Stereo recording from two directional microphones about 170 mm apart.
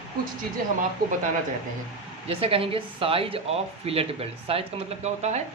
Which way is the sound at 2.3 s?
35° right (ahead or behind).